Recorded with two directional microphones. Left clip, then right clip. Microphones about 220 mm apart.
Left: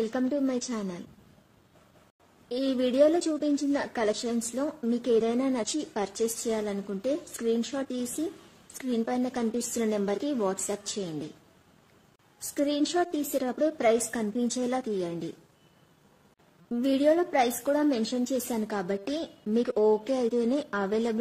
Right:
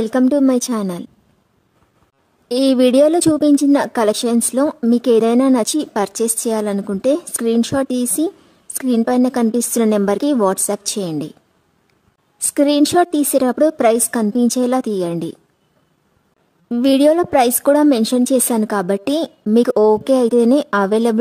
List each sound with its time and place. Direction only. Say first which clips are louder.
0.0 s a woman's voice: right 14 dB; 50° right (ahead or behind)
2.4 s a woman's voice: right 14 dB; 55° right (ahead or behind)
12.5 s a woman's voice: right 14 dB; 50° right (ahead or behind)
16.6 s a woman's voice: right 11 dB; 50° right (ahead or behind)